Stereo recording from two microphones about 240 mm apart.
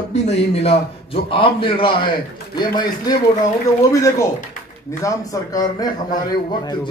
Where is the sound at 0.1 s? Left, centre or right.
Left.